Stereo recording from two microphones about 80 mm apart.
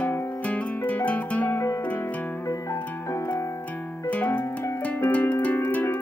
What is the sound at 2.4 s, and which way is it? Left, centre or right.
Music, left.